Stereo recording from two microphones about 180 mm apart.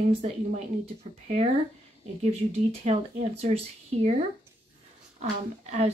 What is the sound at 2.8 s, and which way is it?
Speech, 40° right (ahead or behind).